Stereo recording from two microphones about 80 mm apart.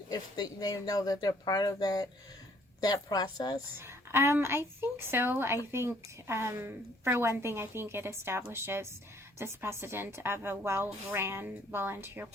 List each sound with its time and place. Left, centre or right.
0.1 s speech: left
3.8 s a woman's voice: right